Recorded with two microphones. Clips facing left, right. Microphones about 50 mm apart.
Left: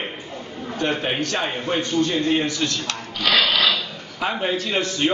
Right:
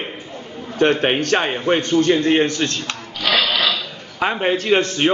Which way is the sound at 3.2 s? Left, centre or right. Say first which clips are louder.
Even; centre.